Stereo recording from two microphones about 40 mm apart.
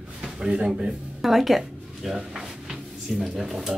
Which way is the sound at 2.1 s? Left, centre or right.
Centre.